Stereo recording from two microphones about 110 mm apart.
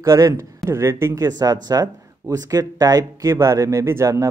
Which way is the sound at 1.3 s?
35° right (ahead or behind).